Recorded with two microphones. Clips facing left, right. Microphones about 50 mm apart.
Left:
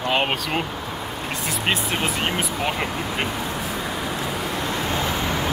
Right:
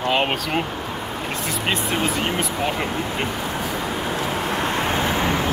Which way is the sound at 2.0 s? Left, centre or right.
Centre.